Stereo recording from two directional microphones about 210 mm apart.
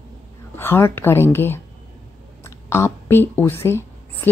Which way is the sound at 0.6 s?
10° left (ahead or behind).